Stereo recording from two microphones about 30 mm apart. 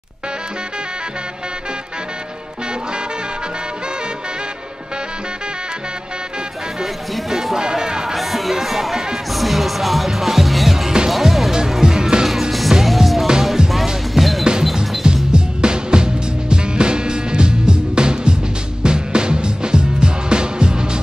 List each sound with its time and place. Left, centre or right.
6.8 s music: centre
7.5 s music: right
8.1 s music: centre
11.8 s music: right
12.3 s music: centre
13.6 s music: right
14.1 s music: centre
15.3 s music: right